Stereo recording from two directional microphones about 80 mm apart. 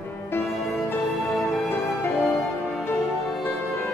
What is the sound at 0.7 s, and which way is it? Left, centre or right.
Music, left.